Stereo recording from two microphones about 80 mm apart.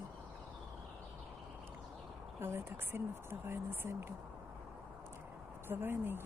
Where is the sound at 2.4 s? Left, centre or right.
Right.